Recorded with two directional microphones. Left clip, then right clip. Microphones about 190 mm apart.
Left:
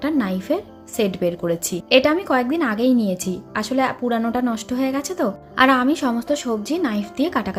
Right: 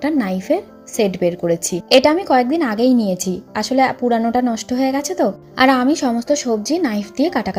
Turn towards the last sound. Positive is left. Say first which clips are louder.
# right 3 dB
turn(degrees=-15)  # may be behind; listen again after turning